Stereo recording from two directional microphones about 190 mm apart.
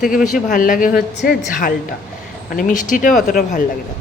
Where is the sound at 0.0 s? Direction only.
45° left (ahead or behind).